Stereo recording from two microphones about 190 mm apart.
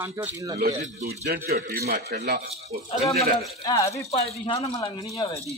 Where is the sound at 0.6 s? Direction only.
55° right (ahead or behind).